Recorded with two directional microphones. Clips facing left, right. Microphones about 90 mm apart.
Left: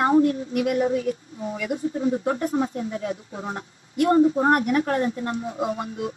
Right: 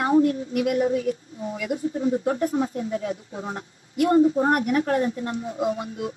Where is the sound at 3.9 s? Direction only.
40° left (ahead or behind).